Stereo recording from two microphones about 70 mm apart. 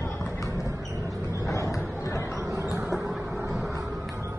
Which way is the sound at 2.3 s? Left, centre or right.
Right.